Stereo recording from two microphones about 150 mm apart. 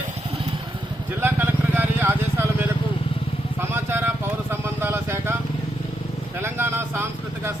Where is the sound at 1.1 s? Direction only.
15° right (ahead or behind).